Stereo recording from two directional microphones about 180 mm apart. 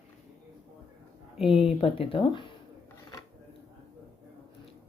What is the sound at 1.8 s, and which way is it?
Speech, 30° left (ahead or behind).